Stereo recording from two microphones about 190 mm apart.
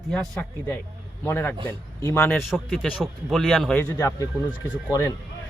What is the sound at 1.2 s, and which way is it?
A man's voice, 10° left (ahead or behind).